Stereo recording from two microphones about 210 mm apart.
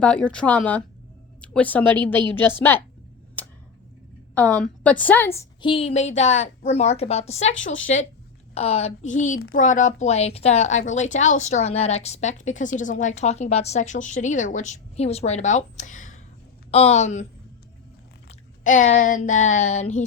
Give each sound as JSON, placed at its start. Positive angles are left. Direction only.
{"t": 0.0, "sound": "a woman's voice", "side_deg": 5}
{"t": 4.6, "sound": "a woman's voice", "side_deg": 5}
{"t": 5.6, "sound": "a woman's voice", "side_deg": 25}
{"t": 7.5, "sound": "speech", "side_deg": 65}
{"t": 8.5, "sound": "a woman's voice", "side_deg": 30}
{"t": 18.3, "sound": "chewing", "side_deg": 35}
{"t": 18.9, "sound": "a woman's voice", "side_deg": 40}